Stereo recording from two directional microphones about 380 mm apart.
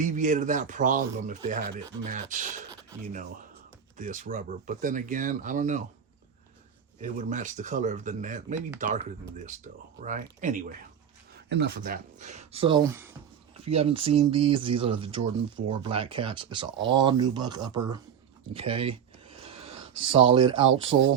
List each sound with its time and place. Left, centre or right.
0.0 s speech: right
7.0 s speech: centre
19.4 s a sound: centre
20.1 s speech: centre